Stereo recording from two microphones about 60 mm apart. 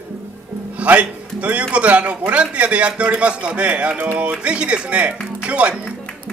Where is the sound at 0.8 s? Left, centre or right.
Right.